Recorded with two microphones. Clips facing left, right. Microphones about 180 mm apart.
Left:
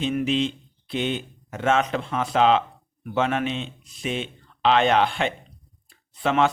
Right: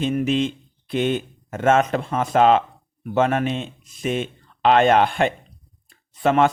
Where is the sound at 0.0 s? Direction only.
45° right (ahead or behind).